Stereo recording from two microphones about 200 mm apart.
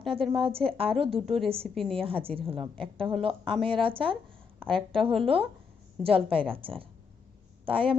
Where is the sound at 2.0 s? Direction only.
25° right (ahead or behind).